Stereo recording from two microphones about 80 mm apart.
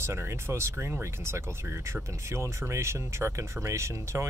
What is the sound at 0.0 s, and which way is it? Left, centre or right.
Speech, right.